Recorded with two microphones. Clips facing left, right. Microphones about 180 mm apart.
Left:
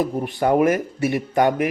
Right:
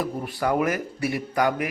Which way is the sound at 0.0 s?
20° left (ahead or behind).